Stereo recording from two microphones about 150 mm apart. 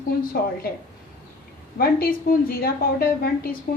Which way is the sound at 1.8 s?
85° left.